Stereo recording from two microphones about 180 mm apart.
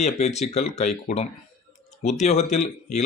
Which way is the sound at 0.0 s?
40° left (ahead or behind).